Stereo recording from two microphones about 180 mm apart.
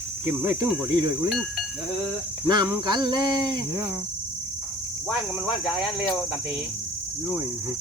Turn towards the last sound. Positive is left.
turn(degrees=0)  # may be behind; listen again after turning